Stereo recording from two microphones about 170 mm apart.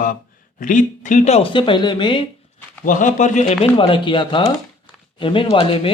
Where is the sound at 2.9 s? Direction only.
50° left (ahead or behind).